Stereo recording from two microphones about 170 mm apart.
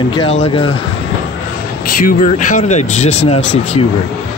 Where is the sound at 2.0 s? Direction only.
45° left (ahead or behind).